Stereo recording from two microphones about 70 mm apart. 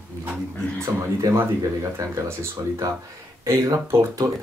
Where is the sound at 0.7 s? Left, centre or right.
Right.